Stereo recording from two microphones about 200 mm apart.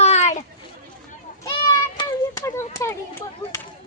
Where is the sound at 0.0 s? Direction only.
35° left (ahead or behind).